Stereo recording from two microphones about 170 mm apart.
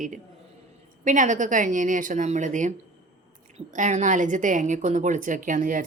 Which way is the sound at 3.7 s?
45° right (ahead or behind).